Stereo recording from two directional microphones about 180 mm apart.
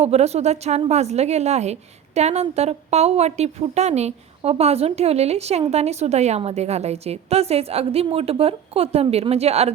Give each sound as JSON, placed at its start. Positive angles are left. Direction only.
{"t": 0.0, "sound": "a woman's voice", "side_deg": -35}